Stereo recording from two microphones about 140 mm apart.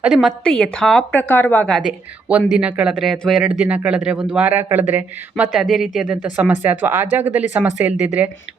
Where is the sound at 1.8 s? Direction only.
5° right (ahead or behind).